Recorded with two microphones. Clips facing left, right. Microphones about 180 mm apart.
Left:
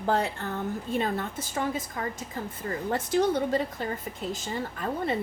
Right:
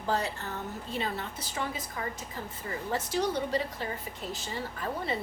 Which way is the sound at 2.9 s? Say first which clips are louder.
Left 5 dB; 50° left (ahead or behind).